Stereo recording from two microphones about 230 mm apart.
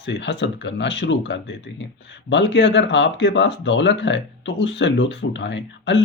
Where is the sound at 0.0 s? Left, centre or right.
Left.